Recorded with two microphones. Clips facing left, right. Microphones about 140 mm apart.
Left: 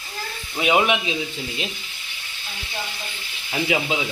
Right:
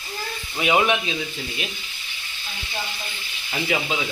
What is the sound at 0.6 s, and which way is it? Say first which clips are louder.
Speech: left 1 dB; 15° left (ahead or behind).